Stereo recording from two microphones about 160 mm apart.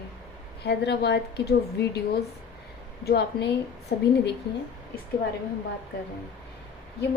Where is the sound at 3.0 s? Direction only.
85° left.